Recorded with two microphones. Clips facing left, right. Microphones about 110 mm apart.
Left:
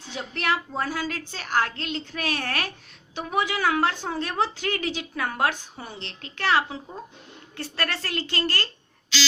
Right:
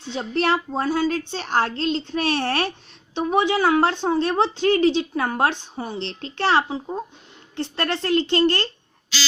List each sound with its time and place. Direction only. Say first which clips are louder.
0.1 s speech: right 6 dB; 30° right (ahead or behind)